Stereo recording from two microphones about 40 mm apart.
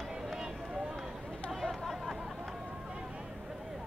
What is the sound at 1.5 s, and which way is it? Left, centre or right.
Chatter, centre.